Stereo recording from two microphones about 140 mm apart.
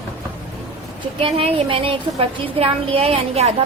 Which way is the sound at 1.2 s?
40° right (ahead or behind).